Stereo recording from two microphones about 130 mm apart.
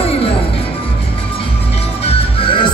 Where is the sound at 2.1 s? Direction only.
45° left (ahead or behind).